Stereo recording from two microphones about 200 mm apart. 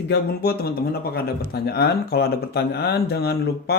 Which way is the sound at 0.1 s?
55° left (ahead or behind).